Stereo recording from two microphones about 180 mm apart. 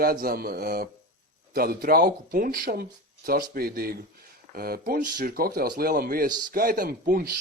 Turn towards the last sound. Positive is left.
turn(degrees=-55)  # may be behind; listen again after turning